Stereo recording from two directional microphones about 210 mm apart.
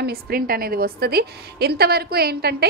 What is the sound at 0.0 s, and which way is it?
A woman's voice, 45° right (ahead or behind).